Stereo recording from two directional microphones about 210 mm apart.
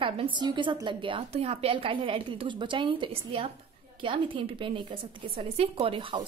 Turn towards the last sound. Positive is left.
turn(degrees=-25)  # may be behind; listen again after turning